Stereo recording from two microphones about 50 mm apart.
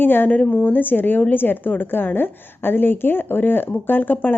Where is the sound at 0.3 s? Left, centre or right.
Left.